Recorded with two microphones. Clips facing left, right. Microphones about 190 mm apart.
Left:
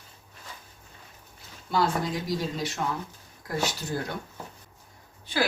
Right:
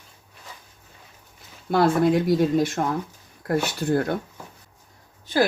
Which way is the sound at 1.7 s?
55° right (ahead or behind).